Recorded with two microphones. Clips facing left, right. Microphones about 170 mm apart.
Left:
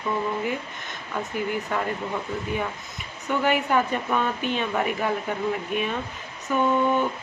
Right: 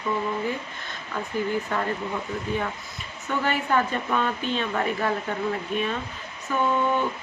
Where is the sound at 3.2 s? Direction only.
15° left (ahead or behind).